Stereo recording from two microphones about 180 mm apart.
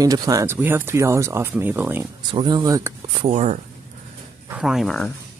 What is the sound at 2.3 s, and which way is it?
Speech, 25° right (ahead or behind).